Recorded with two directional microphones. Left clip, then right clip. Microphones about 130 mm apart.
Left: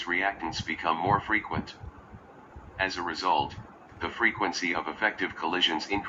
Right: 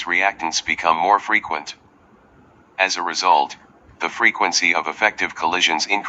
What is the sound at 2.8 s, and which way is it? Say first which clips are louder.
Speech: right 10 dB; 30° right (ahead or behind).